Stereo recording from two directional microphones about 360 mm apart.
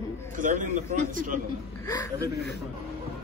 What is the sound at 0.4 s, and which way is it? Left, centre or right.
A man's voice, right.